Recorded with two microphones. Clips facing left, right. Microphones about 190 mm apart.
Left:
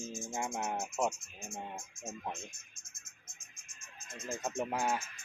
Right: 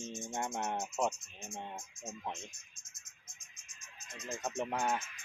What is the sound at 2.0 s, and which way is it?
Speech, 50° left (ahead or behind).